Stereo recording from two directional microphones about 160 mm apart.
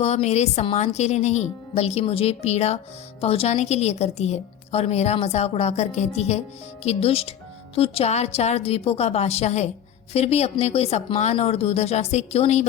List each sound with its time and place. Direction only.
0.0 s speech: 45° left (ahead or behind)